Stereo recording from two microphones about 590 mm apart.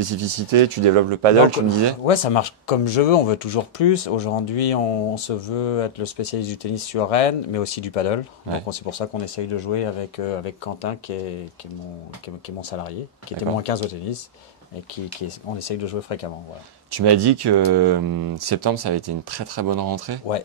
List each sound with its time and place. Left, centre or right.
0.0 s speech: right
2.0 s speech: left
12.4 s speech: left
15.2 s speech: left
16.9 s speech: right